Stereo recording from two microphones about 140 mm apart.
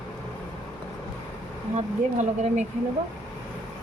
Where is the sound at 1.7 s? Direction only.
55° right (ahead or behind).